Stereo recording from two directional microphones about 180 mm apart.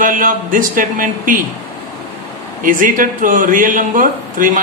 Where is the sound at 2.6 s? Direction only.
50° right (ahead or behind).